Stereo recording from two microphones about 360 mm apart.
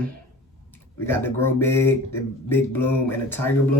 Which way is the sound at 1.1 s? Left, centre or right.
Centre.